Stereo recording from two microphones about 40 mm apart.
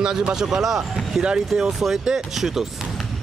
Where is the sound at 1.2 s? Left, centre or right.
Right.